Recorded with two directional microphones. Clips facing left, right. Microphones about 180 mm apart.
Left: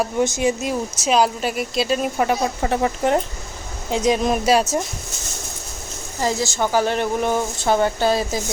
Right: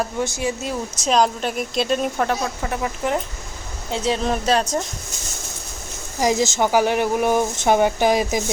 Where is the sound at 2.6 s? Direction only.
35° left (ahead or behind).